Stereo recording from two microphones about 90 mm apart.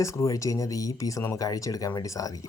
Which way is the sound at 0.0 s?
35° left (ahead or behind).